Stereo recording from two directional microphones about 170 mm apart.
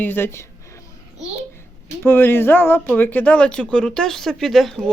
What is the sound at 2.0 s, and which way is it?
Speech, 15° left (ahead or behind).